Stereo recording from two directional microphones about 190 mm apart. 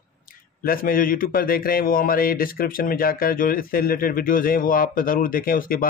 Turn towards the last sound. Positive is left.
turn(degrees=50)  # may be behind; listen again after turning